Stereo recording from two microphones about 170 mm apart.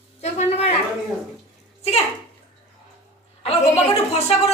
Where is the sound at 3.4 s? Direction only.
35° left (ahead or behind).